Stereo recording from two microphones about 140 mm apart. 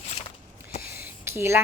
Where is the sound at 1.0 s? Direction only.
15° right (ahead or behind).